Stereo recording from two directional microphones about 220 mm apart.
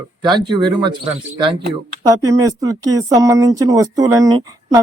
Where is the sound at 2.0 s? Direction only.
15° right (ahead or behind).